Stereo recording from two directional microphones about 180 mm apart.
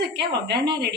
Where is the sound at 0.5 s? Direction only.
70° right (ahead or behind).